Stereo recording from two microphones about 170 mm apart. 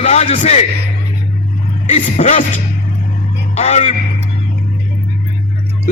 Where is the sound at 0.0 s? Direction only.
40° left (ahead or behind).